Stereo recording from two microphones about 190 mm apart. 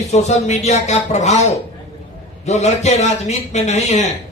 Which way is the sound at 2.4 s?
35° left (ahead or behind).